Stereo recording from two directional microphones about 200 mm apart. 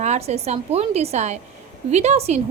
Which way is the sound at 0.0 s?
35° right (ahead or behind).